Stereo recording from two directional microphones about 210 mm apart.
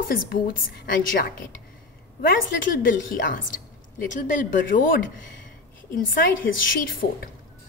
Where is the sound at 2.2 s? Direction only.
40° left (ahead or behind).